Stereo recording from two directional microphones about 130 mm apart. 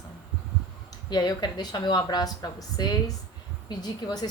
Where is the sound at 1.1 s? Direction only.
30° left (ahead or behind).